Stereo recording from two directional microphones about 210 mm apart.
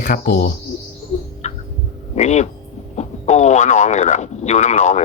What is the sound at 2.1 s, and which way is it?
Speech, 35° left (ahead or behind).